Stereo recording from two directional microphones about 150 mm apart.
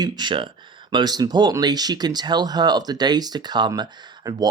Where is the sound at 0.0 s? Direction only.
30° right (ahead or behind).